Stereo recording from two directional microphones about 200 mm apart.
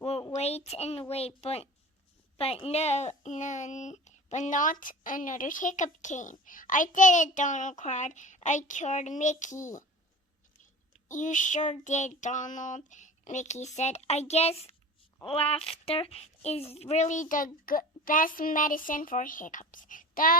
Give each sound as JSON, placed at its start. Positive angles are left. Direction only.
{"t": 0.0, "sound": "a sound", "side_deg": 30}
{"t": 1.4, "sound": "speech", "side_deg": 30}
{"t": 11.1, "sound": "speech", "side_deg": 40}